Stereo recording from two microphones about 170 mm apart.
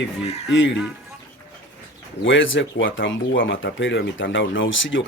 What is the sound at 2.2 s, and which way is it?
Speech, 90° left.